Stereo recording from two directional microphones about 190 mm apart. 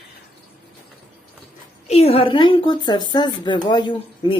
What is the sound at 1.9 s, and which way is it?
Speech, 30° left (ahead or behind).